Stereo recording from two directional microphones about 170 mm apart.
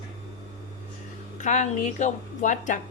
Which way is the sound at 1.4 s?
45° left (ahead or behind).